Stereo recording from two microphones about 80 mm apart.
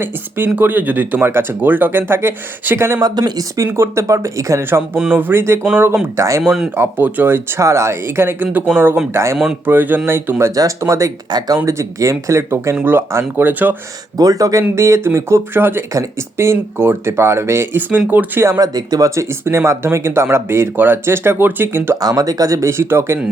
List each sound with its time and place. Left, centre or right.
0.0 s speech: right
3.0 s speech: right
3.7 s speech: right
6.1 s speech: right
6.4 s speech: centre
6.7 s speech: right
9.6 s speech: right
10.5 s speech: right
11.3 s speech: right
14.2 s speech: right
17.7 s speech: right
18.6 s speech: right
19.5 s speech: right
22.0 s speech: right